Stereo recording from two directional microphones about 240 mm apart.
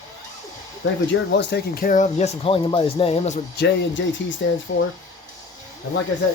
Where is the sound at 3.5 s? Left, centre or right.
Left.